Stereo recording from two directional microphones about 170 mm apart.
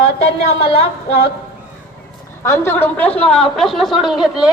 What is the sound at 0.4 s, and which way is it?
Speech, 35° left (ahead or behind).